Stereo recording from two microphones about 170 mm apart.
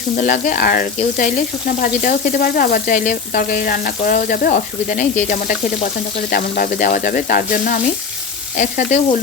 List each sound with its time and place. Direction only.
0.2 s frying: 55° left (ahead or behind)
8.5 s speech: 50° left (ahead or behind)